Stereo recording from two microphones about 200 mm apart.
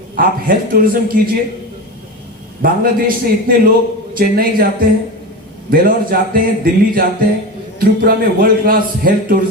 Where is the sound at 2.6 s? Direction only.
45° right (ahead or behind).